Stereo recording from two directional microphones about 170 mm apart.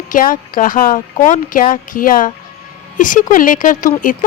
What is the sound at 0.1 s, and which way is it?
Speech, 55° left (ahead or behind).